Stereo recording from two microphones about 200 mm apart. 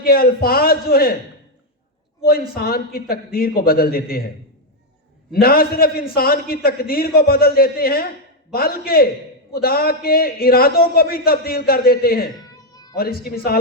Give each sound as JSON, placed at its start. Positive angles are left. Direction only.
{"t": 0.0, "sound": "a man's voice", "side_deg": 50}
{"t": 2.2, "sound": "a man's voice", "side_deg": 50}
{"t": 5.3, "sound": "a man's voice", "side_deg": 50}
{"t": 12.5, "sound": "a sound", "side_deg": 20}
{"t": 13.0, "sound": "a man's voice", "side_deg": 50}